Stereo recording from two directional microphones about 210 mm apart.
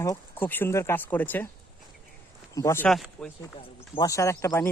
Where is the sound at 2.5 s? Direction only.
15° left (ahead or behind).